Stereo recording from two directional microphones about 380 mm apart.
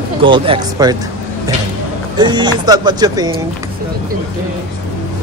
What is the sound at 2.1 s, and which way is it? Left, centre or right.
Speech, centre.